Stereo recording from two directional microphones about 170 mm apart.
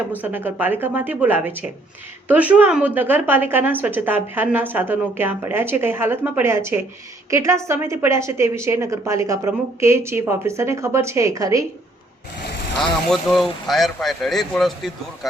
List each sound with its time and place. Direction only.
0.2 s a woman's voice: 10° right (ahead or behind)
13.1 s speech: centre (ahead or behind)